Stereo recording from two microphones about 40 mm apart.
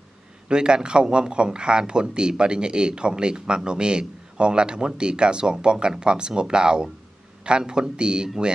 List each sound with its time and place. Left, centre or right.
0.5 s speech: right